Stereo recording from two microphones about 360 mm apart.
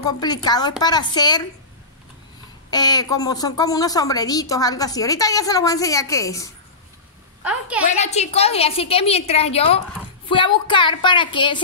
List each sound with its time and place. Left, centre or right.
0.2 s a woman's voice: centre
2.7 s a woman's voice: centre
7.4 s a woman's voice: centre
7.9 s a woman's voice: centre